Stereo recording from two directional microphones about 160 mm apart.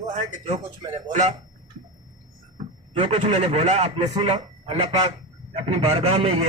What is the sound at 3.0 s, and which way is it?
A man's voice, 45° right (ahead or behind).